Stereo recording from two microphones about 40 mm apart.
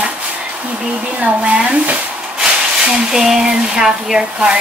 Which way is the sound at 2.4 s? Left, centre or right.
Right.